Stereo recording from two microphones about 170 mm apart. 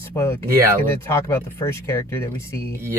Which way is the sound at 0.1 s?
15° left (ahead or behind).